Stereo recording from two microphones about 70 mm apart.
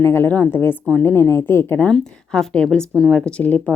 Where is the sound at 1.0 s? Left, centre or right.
Left.